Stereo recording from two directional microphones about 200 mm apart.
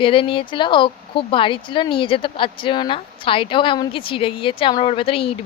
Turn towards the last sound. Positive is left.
turn(degrees=30)  # may be behind; listen again after turning